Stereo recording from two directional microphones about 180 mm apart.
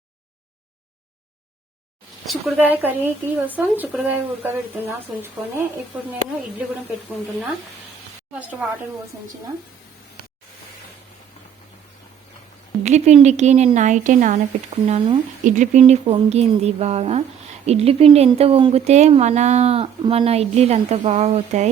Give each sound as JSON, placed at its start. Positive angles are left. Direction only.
{"t": 2.2, "sound": "speech", "side_deg": -10}
{"t": 12.8, "sound": "speech", "side_deg": -40}
{"t": 14.8, "sound": "speech", "side_deg": -30}
{"t": 15.4, "sound": "speech", "side_deg": -45}